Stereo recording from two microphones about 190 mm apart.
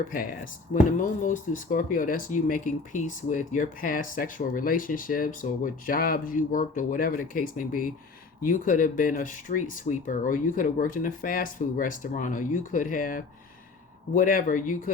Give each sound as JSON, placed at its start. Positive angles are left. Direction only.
{"t": 0.7, "sound": "speech", "side_deg": 40}